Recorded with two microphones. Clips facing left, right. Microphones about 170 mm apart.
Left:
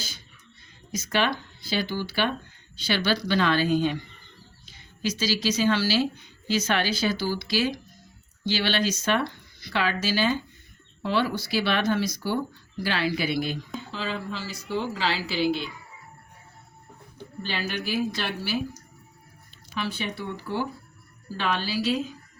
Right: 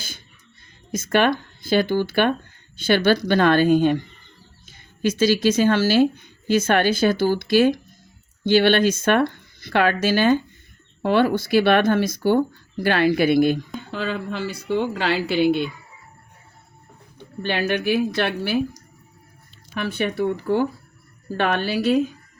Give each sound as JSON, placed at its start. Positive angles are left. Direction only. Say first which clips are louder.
{"t": 0.9, "sound": "speech", "louder": "right 7 dB", "side_deg": -50}
{"t": 17.2, "sound": "speech", "louder": "right 8 dB", "side_deg": -60}
{"t": 19.7, "sound": "speech", "louder": "right 7 dB", "side_deg": -55}